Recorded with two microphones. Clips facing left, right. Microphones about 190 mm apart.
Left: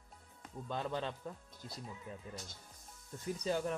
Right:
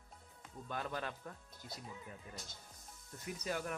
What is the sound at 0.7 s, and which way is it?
Speech, 25° left (ahead or behind).